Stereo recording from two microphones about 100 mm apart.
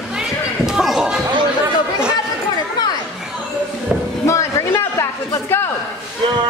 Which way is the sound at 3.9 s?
15° right (ahead or behind).